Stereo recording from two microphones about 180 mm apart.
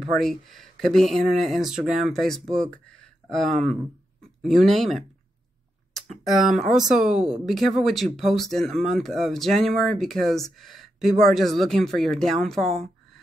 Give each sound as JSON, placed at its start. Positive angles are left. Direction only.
{"t": 0.1, "sound": "speech", "side_deg": 0}